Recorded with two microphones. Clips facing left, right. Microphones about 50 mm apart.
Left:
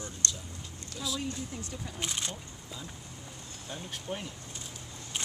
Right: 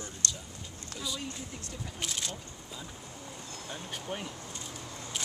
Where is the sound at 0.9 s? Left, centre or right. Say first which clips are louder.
Left 3 dB; centre.